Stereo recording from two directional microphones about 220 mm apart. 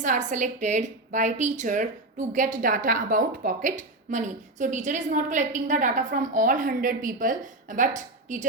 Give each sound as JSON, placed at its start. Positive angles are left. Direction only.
{"t": 0.0, "sound": "a woman's voice", "side_deg": -35}